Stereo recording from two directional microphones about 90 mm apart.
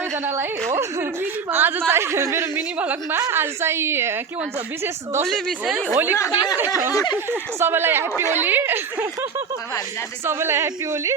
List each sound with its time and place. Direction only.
1.5 s a woman's voice: 25° right (ahead or behind)
2.7 s a woman's voice: 15° right (ahead or behind)
3.2 s a woman's voice: 30° right (ahead or behind)
5.3 s speech: 5° right (ahead or behind)
5.7 s a woman's voice: 20° right (ahead or behind)
6.9 s speech: 50° left (ahead or behind)
7.3 s a woman's voice: 25° right (ahead or behind)
10.2 s a woman's voice: 30° right (ahead or behind)